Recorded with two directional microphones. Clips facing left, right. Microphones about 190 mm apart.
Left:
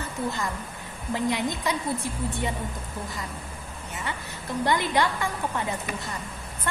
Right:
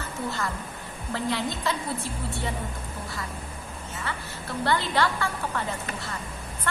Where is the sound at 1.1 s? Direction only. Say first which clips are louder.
Left 2 dB; 15° left (ahead or behind).